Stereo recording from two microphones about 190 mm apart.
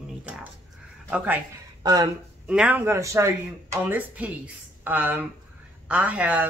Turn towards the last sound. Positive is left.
turn(degrees=-5)  # may be behind; listen again after turning